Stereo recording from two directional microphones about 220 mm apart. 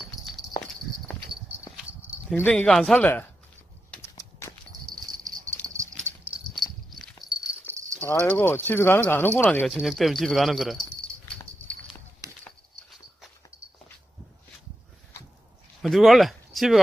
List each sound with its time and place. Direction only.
0.4 s walk: 15° left (ahead or behind)
1.8 s a sound: 5° right (ahead or behind)
2.3 s speech: 5° left (ahead or behind)
4.1 s clip-clop: 15° left (ahead or behind)
5.2 s clip-clop: 15° right (ahead or behind)
6.5 s a sound: centre (ahead or behind)
8.0 s speech: 5° left (ahead or behind)
15.8 s speech: centre (ahead or behind)